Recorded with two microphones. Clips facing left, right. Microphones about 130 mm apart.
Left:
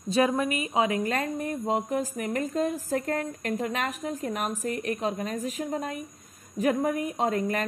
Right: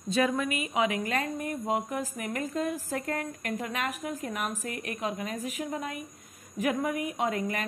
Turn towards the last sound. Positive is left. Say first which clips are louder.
# left 3 dB
turn(degrees=40)  # may be behind; listen again after turning